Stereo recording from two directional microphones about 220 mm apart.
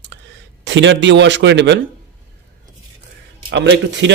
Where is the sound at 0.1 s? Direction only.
55° right (ahead or behind).